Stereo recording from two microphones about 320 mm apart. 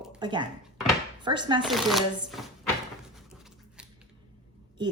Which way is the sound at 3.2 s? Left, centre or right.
Centre.